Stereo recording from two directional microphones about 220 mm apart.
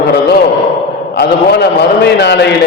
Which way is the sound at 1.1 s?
50° left (ahead or behind).